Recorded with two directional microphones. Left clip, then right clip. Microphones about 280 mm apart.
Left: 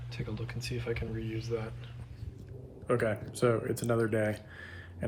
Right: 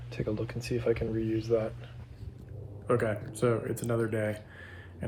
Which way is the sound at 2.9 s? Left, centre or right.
Centre.